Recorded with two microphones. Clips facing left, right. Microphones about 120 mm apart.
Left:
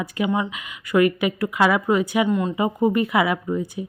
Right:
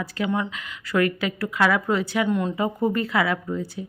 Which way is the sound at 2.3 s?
Centre (ahead or behind).